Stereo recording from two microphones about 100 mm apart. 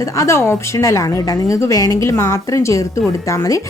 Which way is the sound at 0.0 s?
30° left (ahead or behind).